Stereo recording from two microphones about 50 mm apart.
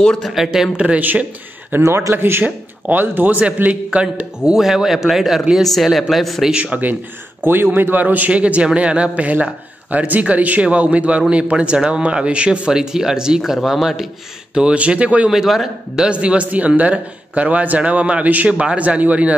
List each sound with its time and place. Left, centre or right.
0.2 s speech: centre
0.7 s a man's voice: right
1.8 s speech: right
2.4 s speech: right
3.9 s a man's voice: right
4.5 s speech: centre
6.5 s a man's voice: right
7.4 s speech: right
8.3 s a man's voice: right
13.4 s speech: centre
14.5 s a man's voice: right
15.2 s speech: centre
16.1 s a man's voice: right